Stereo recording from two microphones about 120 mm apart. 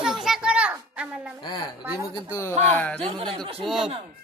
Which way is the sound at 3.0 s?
55° right (ahead or behind).